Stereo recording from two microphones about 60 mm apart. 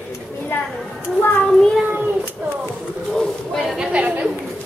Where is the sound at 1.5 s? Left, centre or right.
Centre.